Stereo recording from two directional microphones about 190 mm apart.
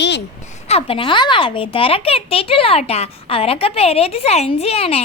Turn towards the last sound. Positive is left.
turn(degrees=30)  # may be behind; listen again after turning